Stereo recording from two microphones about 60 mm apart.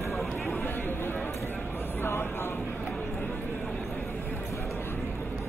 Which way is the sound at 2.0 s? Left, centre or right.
Left.